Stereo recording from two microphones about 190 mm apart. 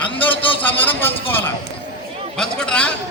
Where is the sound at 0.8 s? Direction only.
10° left (ahead or behind).